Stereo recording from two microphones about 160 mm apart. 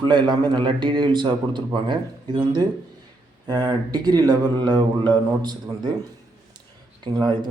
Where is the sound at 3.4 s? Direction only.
25° right (ahead or behind).